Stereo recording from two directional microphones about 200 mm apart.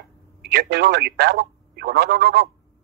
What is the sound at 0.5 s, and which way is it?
Speech, 55° right (ahead or behind).